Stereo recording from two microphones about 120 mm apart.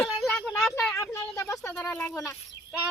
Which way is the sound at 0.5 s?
5° left (ahead or behind).